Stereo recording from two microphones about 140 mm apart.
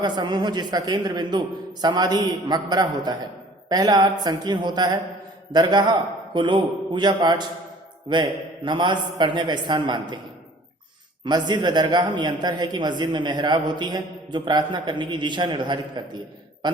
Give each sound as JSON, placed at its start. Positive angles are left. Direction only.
{"t": 0.0, "sound": "a man's voice", "side_deg": -30}
{"t": 11.3, "sound": "a man's voice", "side_deg": -30}